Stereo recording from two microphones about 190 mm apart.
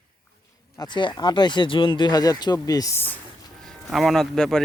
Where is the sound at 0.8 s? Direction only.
25° left (ahead or behind).